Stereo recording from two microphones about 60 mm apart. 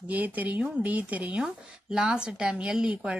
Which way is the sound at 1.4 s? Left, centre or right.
Centre.